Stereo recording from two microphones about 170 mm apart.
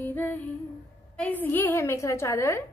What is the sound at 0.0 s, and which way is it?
Female singing, 10° left (ahead or behind).